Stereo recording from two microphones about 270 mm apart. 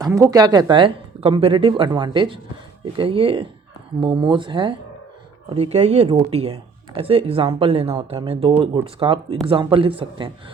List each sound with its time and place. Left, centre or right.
0.0 s speech: centre